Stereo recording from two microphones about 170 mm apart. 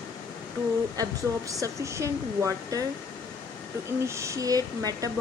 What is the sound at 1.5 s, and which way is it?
Speech, 20° right (ahead or behind).